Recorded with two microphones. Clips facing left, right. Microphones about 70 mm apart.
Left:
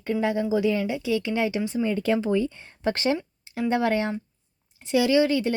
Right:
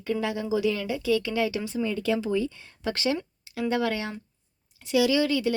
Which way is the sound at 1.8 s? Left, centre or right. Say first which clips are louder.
Left 2 dB; left.